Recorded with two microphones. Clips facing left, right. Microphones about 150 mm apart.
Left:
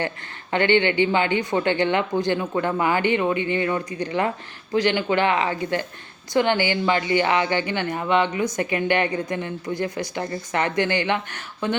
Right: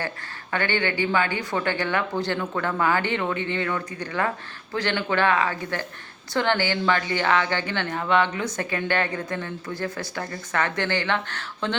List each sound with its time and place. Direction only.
0.5 s speech: 20° left (ahead or behind)